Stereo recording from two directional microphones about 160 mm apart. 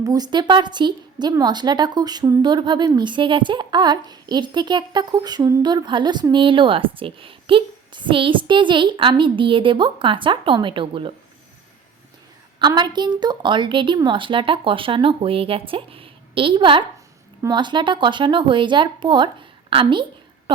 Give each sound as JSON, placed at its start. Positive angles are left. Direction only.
{"t": 0.0, "sound": "a woman's voice", "side_deg": -25}
{"t": 12.5, "sound": "a woman's voice", "side_deg": -30}